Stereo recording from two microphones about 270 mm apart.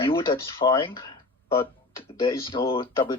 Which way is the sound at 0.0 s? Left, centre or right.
Centre.